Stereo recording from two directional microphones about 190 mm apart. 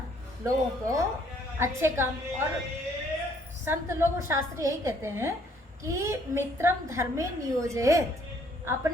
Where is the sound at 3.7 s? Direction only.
15° right (ahead or behind).